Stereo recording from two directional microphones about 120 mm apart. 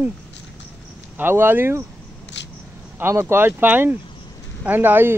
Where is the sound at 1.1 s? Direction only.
15° right (ahead or behind).